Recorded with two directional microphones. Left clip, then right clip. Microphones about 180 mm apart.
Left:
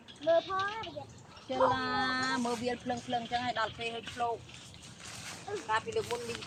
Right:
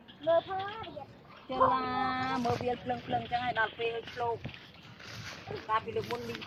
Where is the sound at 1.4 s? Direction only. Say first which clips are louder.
Right 1 dB; 10° left (ahead or behind).